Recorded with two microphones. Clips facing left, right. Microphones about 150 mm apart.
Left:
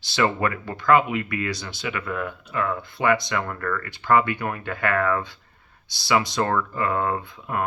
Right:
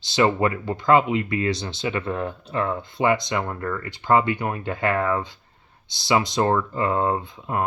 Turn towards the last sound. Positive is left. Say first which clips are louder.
# right 2 dB
turn(degrees=-25)  # may be behind; listen again after turning